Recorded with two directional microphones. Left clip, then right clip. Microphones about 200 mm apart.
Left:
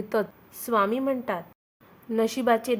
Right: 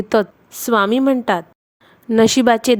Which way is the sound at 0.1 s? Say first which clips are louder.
Right 11 dB; 40° right (ahead or behind).